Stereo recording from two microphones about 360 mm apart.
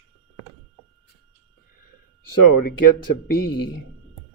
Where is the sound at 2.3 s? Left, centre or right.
Left.